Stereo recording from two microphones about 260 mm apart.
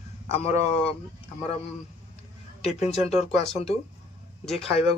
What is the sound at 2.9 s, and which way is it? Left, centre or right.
Speech, left.